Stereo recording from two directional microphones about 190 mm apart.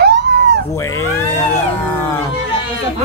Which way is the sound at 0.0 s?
60° right (ahead or behind).